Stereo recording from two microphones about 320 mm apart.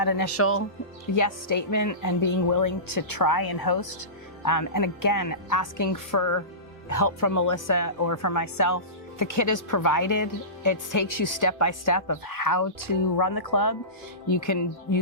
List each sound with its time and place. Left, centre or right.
0.0 s speech: left
0.3 s speech: left
1.1 s speech: left
4.4 s speech: left
14.3 s speech: left